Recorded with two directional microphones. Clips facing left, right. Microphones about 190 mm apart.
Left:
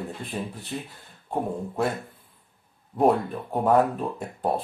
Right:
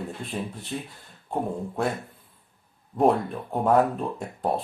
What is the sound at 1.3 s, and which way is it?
Speech, 5° left (ahead or behind).